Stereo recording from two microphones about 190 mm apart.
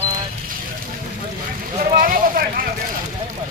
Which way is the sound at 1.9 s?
50° right (ahead or behind).